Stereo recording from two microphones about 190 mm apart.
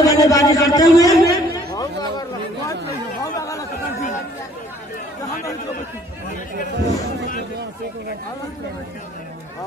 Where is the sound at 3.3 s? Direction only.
15° left (ahead or behind).